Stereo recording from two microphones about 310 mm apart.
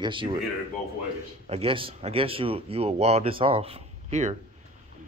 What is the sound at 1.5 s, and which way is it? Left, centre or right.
Speech, centre.